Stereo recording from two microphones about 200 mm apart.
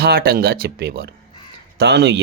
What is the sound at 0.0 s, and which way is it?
Speech, 50° right (ahead or behind).